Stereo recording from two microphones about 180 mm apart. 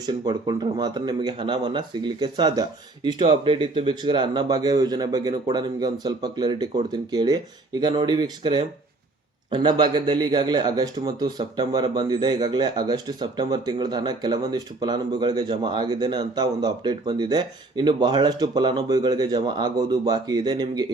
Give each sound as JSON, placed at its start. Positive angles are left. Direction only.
{"t": 0.0, "sound": "a man's voice", "side_deg": -25}